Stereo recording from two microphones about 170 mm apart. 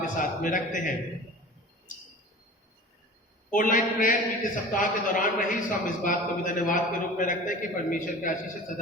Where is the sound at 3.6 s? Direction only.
55° left (ahead or behind).